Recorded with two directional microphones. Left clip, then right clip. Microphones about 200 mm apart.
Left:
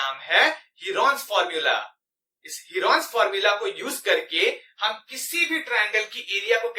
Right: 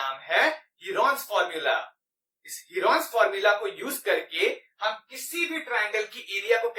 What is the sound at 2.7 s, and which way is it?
Speech, centre (ahead or behind).